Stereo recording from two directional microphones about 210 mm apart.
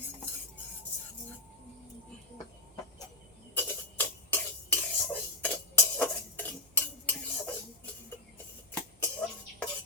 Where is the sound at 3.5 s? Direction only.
10° left (ahead or behind).